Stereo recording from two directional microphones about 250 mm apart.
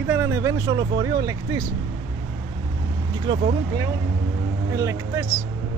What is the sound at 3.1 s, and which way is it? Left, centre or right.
Speech, centre.